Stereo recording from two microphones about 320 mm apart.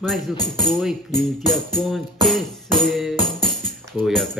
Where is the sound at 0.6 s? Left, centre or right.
Centre.